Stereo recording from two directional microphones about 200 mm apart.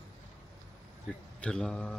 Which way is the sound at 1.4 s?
5° left (ahead or behind).